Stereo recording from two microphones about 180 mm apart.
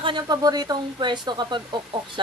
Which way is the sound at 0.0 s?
25° right (ahead or behind).